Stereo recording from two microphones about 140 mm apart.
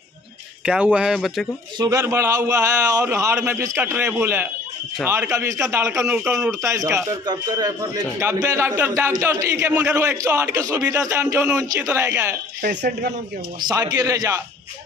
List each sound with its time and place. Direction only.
0.7 s speech: 10° right (ahead or behind)
1.8 s a man's voice: 25° right (ahead or behind); by 6.5 s 10° right (ahead or behind)
6.6 s a man's voice: 20° right (ahead or behind)
13.6 s a man's voice: 30° right (ahead or behind)